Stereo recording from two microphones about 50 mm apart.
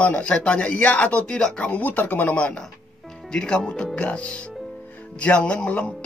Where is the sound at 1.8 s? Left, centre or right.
Left.